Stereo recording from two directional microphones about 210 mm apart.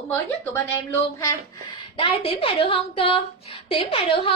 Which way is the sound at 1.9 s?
25° left (ahead or behind).